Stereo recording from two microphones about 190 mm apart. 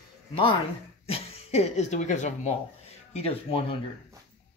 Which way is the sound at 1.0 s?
30° left (ahead or behind).